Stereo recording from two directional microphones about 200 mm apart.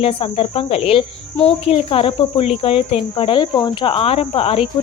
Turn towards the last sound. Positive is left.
turn(degrees=30)  # may be behind; listen again after turning